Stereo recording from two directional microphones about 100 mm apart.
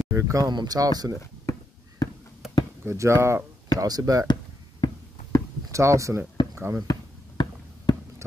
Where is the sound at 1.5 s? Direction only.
30° left (ahead or behind).